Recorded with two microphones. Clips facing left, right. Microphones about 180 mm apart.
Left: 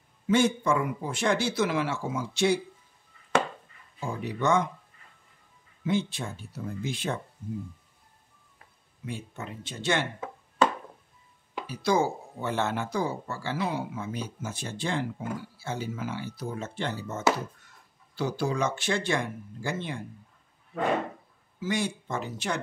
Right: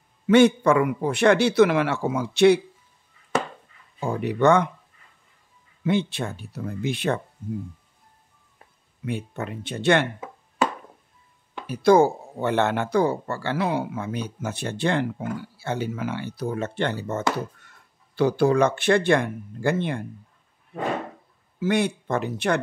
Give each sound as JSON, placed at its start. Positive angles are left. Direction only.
{"t": 0.3, "sound": "speech", "side_deg": -70}
{"t": 4.0, "sound": "speech", "side_deg": -65}
{"t": 5.9, "sound": "speech", "side_deg": -65}
{"t": 9.0, "sound": "speech", "side_deg": -65}
{"t": 11.6, "sound": "speech", "side_deg": -55}
{"t": 21.5, "sound": "speech", "side_deg": -60}